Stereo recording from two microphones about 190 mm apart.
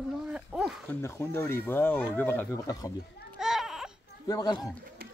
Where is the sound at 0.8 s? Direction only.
15° left (ahead or behind).